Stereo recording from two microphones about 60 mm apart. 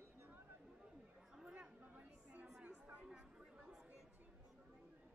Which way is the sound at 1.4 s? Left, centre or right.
Centre.